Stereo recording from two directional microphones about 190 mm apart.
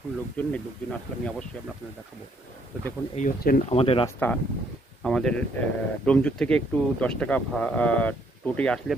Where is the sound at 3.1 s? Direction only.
45° left (ahead or behind).